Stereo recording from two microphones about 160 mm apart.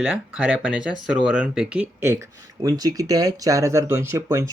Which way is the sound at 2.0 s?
20° right (ahead or behind).